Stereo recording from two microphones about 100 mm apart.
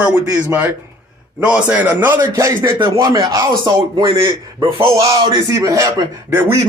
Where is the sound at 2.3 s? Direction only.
30° right (ahead or behind); by 4.4 s 50° right (ahead or behind).